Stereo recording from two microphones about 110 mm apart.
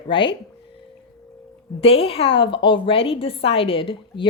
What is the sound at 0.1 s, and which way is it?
Speech, 50° left (ahead or behind).